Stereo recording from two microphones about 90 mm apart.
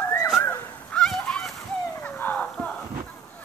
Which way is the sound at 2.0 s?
20° left (ahead or behind).